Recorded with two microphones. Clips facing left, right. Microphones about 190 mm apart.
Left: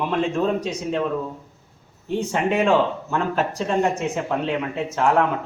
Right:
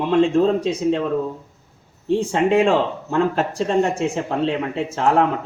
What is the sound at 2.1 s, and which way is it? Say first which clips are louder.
Speech: right 5 dB; 30° right (ahead or behind).